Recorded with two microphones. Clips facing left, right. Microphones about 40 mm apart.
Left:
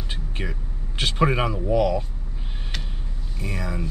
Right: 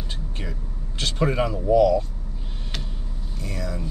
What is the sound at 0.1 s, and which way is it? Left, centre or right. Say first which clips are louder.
A man's voice: left 2 dB; left.